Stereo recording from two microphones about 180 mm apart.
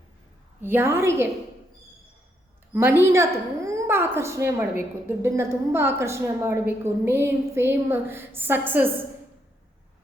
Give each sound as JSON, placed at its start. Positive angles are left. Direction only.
{"t": 0.6, "sound": "a woman's voice", "side_deg": -15}
{"t": 2.7, "sound": "a woman's voice", "side_deg": -10}